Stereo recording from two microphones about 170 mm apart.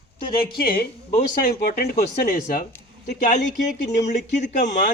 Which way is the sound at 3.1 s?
50° left (ahead or behind).